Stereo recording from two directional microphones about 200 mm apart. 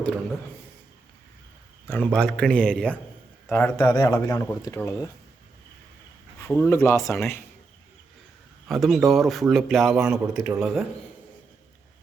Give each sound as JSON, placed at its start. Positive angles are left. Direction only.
{"t": 1.9, "sound": "a man's voice", "side_deg": 5}
{"t": 6.4, "sound": "speech", "side_deg": 10}
{"t": 8.6, "sound": "a man's voice", "side_deg": 0}